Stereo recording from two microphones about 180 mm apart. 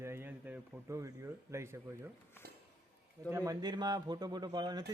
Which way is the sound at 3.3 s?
15° right (ahead or behind).